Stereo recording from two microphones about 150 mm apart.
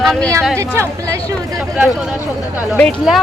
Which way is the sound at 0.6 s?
20° right (ahead or behind).